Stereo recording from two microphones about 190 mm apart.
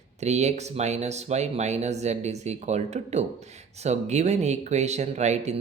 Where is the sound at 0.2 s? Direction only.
35° right (ahead or behind).